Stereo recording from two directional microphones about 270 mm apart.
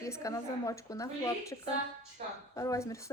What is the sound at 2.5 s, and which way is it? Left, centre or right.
Speech, centre.